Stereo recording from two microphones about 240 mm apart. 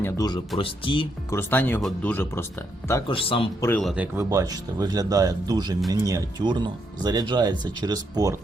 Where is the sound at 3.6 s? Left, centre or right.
Centre.